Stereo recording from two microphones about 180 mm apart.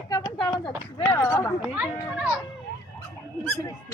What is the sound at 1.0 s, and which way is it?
Speech, 15° left (ahead or behind).